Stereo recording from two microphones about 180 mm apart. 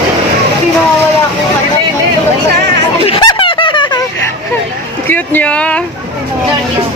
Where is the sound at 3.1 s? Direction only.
25° left (ahead or behind).